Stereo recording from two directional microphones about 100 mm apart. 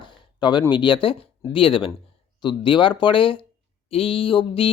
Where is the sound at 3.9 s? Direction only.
70° left (ahead or behind).